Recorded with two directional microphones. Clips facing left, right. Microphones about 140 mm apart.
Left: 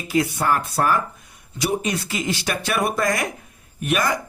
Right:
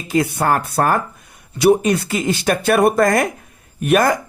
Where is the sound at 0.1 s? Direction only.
50° right (ahead or behind).